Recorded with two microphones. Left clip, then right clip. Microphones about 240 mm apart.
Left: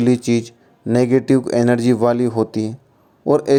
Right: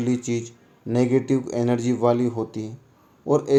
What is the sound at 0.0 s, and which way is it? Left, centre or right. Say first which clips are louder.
A man's voice: left 8 dB; left.